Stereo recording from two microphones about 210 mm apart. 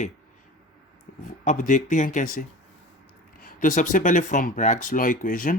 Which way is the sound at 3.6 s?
40° left (ahead or behind).